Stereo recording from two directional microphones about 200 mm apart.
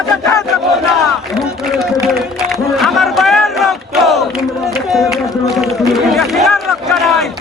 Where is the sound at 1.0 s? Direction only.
Centre (ahead or behind).